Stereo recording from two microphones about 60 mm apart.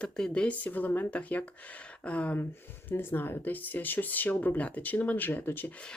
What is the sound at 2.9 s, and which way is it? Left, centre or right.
Speech, left.